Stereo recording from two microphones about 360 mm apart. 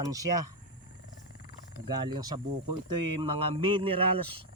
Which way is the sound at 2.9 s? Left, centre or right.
Right.